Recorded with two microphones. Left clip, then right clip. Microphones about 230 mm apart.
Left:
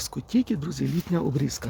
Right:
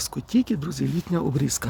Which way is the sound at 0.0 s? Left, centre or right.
Centre.